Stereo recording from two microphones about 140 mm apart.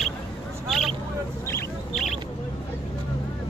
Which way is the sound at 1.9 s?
5° left (ahead or behind).